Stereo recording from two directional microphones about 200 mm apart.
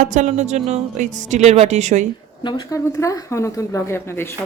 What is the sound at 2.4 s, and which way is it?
Speech, 15° left (ahead or behind).